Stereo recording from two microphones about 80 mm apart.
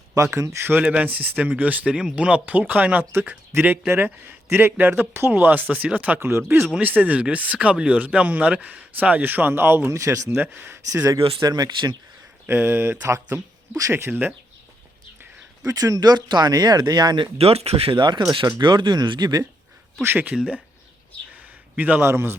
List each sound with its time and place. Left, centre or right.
0.3 s speech: right
0.8 s speech: centre
6.1 s speech: right
10.2 s speech: right
10.9 s speech: right
11.3 s speech: right
12.5 s speech: right
15.6 s speech: right
18.3 s speech: right
18.6 s speech: right
20.0 s speech: right
20.3 s speech: centre
21.3 s a sound: centre
22.0 s speech: right